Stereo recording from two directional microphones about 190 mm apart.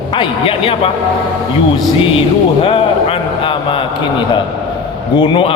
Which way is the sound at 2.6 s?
30° left (ahead or behind).